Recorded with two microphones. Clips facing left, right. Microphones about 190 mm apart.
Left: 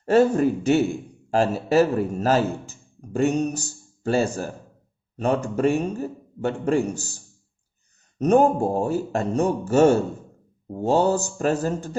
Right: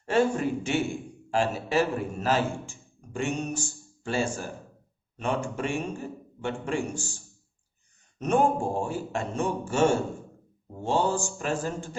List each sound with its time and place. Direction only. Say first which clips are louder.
0.0 s a man's voice: left 7 dB; 40° left (ahead or behind)
8.2 s a man's voice: left 6 dB; 40° left (ahead or behind)